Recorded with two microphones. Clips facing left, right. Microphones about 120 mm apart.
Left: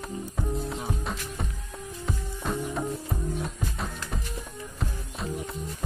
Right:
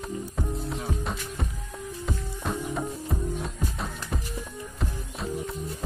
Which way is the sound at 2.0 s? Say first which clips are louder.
Even; centre (ahead or behind).